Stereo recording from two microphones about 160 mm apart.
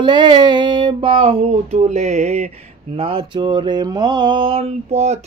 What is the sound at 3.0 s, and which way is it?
Mantra, 35° right (ahead or behind).